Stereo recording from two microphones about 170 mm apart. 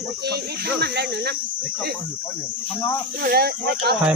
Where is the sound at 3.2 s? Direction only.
65° right (ahead or behind).